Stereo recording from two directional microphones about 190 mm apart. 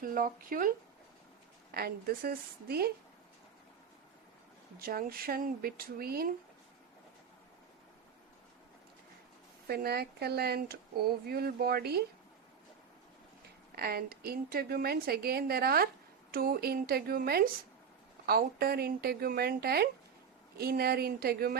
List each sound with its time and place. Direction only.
0.0 s a woman's voice: 45° right (ahead or behind)
1.7 s a woman's voice: 55° right (ahead or behind)
4.8 s a woman's voice: 50° right (ahead or behind)
9.6 s speech: 55° right (ahead or behind)
13.7 s a woman's voice: 55° right (ahead or behind)